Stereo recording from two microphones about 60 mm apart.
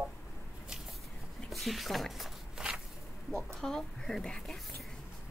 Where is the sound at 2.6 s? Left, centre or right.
Centre.